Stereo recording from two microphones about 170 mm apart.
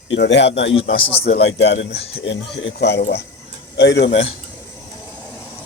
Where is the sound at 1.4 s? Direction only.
80° left.